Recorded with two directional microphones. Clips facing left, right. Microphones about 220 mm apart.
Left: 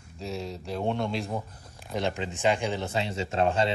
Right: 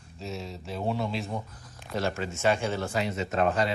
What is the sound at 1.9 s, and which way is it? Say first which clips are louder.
A man's voice: even; 15° left (ahead or behind).